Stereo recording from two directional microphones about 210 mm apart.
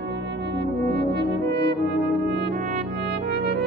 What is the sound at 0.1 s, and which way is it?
Brass instrument, 55° right (ahead or behind).